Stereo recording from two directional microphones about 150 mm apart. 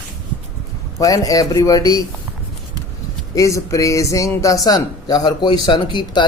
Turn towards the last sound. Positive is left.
turn(degrees=30)  # may be behind; listen again after turning